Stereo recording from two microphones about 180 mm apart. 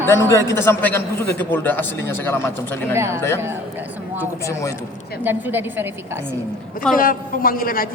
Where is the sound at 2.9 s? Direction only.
15° right (ahead or behind).